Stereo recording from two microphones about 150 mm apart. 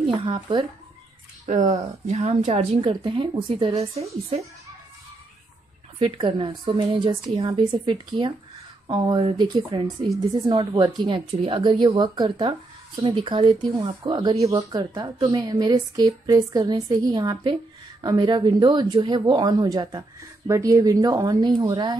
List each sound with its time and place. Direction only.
0.0 s a woman's voice: 35° right (ahead or behind)
1.4 s a woman's voice: 55° right (ahead or behind)
2.9 s a woman's voice: 30° right (ahead or behind)
5.9 s a woman's voice: 35° right (ahead or behind)